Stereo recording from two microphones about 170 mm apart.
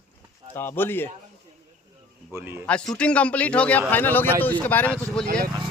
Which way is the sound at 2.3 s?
15° right (ahead or behind).